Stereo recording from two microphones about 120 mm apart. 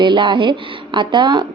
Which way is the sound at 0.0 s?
40° right (ahead or behind).